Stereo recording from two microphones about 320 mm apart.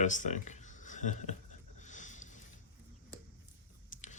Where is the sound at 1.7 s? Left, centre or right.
Left.